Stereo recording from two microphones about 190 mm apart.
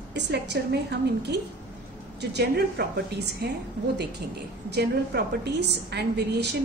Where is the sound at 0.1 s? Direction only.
60° right (ahead or behind).